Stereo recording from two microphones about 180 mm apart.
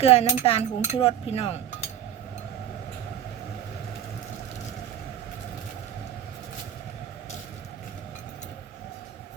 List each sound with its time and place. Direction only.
0.0 s speech: 35° left (ahead or behind)